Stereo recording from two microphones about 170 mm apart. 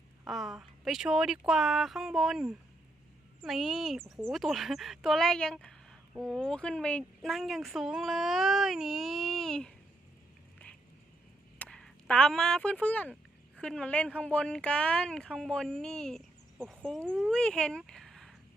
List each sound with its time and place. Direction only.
0.3 s speech: centre (ahead or behind)
11.6 s speech: 5° left (ahead or behind)